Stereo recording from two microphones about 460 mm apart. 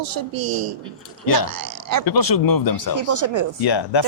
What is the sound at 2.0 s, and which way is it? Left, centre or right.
Speech, left.